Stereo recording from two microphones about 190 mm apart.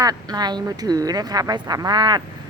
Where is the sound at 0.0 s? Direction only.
20° right (ahead or behind).